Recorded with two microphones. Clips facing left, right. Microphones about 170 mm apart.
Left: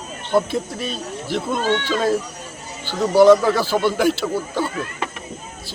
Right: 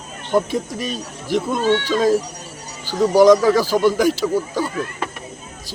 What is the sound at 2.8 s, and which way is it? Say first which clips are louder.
Speech: even; 10° right (ahead or behind).